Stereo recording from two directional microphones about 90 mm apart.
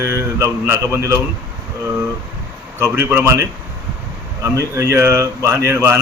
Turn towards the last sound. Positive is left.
turn(degrees=-30)  # may be behind; listen again after turning